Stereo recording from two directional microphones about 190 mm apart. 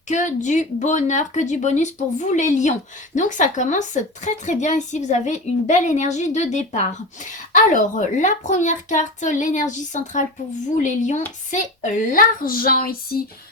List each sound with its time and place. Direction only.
0.1 s a woman's voice: 40° left (ahead or behind)